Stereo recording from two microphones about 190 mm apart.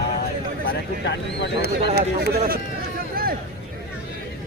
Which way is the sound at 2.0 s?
60° right (ahead or behind).